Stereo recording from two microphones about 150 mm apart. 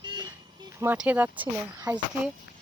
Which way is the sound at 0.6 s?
20° right (ahead or behind).